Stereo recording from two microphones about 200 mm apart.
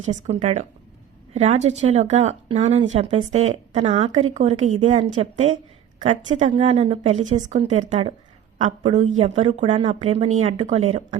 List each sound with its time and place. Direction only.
0.1 s a woman's voice: 35° right (ahead or behind)